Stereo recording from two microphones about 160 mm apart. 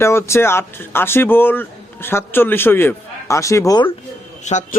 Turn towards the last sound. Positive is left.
turn(degrees=45)  # may be behind; listen again after turning